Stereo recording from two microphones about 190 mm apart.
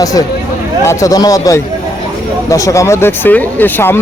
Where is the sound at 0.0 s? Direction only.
20° left (ahead or behind).